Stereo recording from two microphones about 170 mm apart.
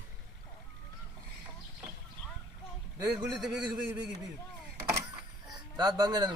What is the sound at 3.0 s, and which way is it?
Speech, 25° right (ahead or behind).